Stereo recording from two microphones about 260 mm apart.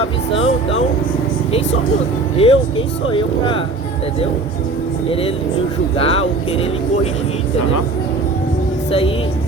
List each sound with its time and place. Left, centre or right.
0.3 s speech: left
2.4 s speech: left
6.0 s speech: left
8.9 s speech: left